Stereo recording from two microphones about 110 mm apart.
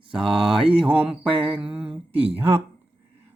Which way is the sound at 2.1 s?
60° right (ahead or behind).